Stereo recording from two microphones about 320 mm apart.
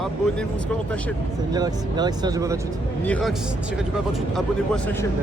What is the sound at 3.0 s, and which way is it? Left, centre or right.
Speech, centre.